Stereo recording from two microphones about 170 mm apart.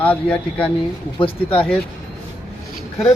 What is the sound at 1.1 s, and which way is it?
Speech, 35° left (ahead or behind).